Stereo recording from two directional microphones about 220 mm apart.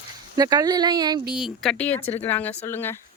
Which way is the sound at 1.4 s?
Centre (ahead or behind).